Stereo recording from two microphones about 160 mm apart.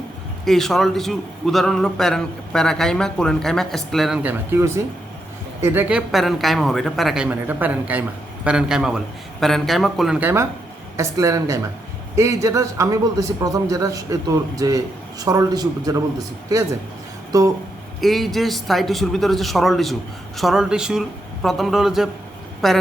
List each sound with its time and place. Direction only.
0.4 s a man's voice: centre (ahead or behind); by 6.0 s 15° right (ahead or behind)
6.1 s a man's voice: centre (ahead or behind); by 17.5 s 20° right (ahead or behind)
18.0 s a man's voice: centre (ahead or behind)